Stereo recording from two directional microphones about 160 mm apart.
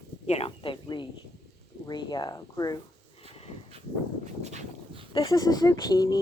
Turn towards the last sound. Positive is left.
turn(degrees=25)  # may be behind; listen again after turning